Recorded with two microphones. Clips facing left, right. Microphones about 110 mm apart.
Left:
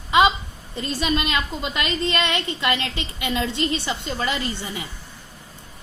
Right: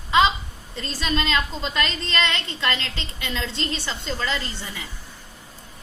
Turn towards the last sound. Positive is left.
turn(degrees=20)  # may be behind; listen again after turning